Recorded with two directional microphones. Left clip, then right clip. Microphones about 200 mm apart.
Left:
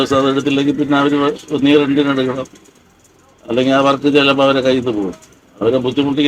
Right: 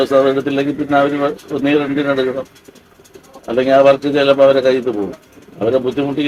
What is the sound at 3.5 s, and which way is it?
A man's voice, 45° left (ahead or behind).